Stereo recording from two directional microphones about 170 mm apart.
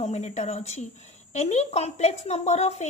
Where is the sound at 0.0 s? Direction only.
40° left (ahead or behind).